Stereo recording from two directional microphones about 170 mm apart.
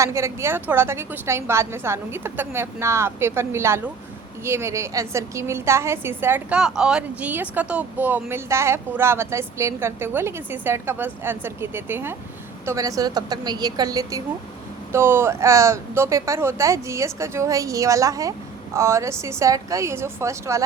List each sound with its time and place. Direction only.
0.0 s a woman's voice: 15° right (ahead or behind)